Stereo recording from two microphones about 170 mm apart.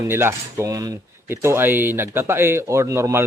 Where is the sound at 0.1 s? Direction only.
15° right (ahead or behind).